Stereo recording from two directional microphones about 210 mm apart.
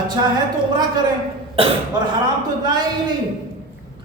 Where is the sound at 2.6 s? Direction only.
20° right (ahead or behind).